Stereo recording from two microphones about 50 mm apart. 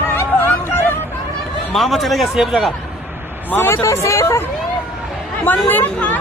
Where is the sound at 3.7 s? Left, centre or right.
Left.